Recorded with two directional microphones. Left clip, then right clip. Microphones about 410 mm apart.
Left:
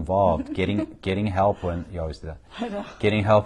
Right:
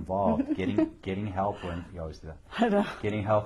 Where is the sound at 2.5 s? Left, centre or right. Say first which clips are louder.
Right 6 dB; right.